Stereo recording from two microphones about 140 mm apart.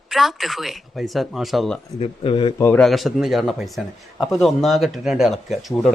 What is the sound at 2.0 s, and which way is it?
Speech, 40° left (ahead or behind).